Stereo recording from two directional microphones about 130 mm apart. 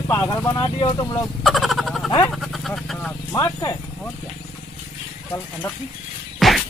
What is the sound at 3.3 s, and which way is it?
Speech, 25° left (ahead or behind).